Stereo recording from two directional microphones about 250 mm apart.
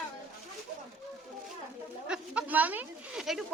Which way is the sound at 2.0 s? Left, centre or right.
Centre.